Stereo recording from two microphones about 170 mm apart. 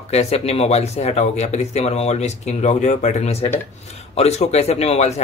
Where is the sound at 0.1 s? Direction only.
40° left (ahead or behind).